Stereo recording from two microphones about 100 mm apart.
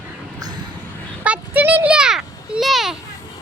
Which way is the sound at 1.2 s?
15° right (ahead or behind).